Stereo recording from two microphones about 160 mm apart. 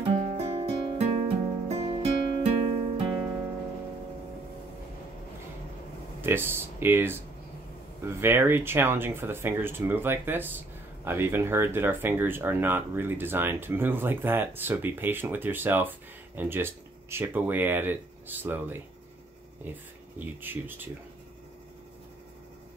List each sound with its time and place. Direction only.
0.0 s music: 45° right (ahead or behind)
6.2 s speech: 15° right (ahead or behind)
20.2 s speech: 10° right (ahead or behind)